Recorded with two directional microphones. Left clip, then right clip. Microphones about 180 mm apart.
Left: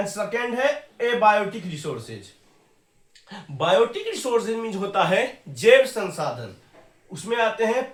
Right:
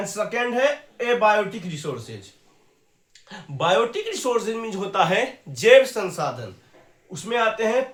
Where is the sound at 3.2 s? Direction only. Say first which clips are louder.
Right 1 dB; 35° right (ahead or behind).